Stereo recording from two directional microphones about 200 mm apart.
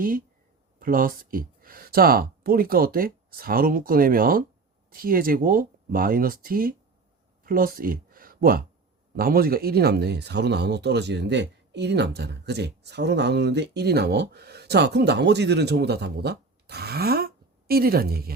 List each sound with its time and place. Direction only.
0.8 s speech: 45° right (ahead or behind)